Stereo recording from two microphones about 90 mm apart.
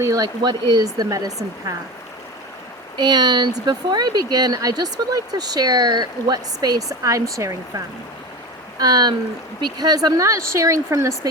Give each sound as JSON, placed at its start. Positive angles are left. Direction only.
{"t": 0.0, "sound": "speech", "side_deg": -45}
{"t": 3.0, "sound": "speech", "side_deg": -55}
{"t": 8.8, "sound": "speech", "side_deg": -45}